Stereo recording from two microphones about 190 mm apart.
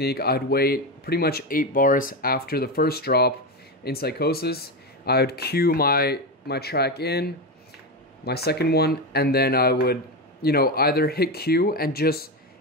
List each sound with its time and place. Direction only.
0.0 s speech: 55° left (ahead or behind)